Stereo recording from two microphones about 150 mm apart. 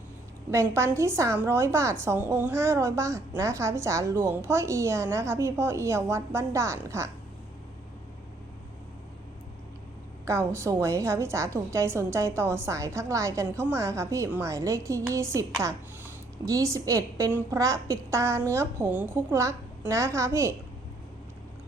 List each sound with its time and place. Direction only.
0.5 s a woman's voice: 20° right (ahead or behind)
10.2 s a woman's voice: 20° right (ahead or behind)